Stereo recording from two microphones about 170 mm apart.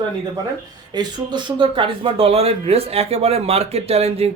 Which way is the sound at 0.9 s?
25° right (ahead or behind).